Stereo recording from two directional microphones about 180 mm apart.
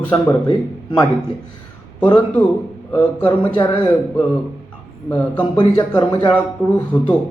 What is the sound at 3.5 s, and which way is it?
Speech, 25° left (ahead or behind).